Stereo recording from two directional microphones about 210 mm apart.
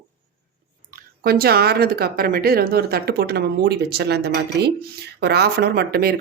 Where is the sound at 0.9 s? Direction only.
45° right (ahead or behind).